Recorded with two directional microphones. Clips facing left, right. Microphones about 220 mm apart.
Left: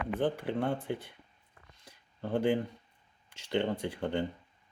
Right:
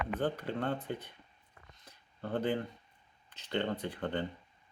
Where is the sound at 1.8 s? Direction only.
10° left (ahead or behind).